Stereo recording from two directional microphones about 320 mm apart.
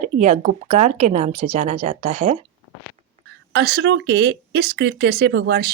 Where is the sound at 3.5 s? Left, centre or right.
Right.